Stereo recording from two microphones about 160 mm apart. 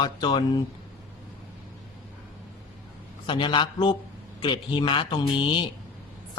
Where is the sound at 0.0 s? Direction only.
30° left (ahead or behind).